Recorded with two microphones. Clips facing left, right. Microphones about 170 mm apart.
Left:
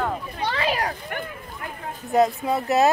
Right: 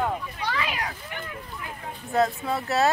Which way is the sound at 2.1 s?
20° left (ahead or behind).